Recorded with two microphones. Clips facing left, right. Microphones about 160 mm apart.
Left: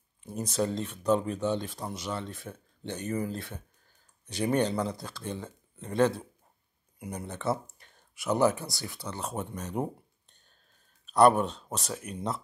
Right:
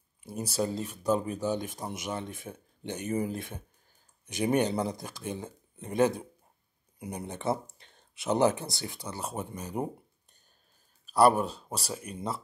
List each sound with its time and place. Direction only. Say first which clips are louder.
0.2 s speech: left 1 dB; 10° right (ahead or behind)
11.1 s speech: left 1 dB; 5° right (ahead or behind)